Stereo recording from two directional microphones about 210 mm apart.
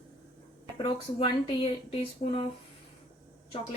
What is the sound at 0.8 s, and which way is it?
Speech, 25° left (ahead or behind).